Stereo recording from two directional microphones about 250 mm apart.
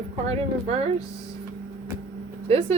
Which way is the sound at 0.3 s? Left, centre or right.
Right.